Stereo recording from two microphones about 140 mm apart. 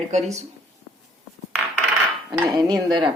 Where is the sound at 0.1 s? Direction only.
55° right (ahead or behind).